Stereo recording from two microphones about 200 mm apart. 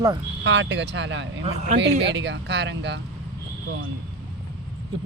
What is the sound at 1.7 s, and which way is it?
Speech, 60° right (ahead or behind).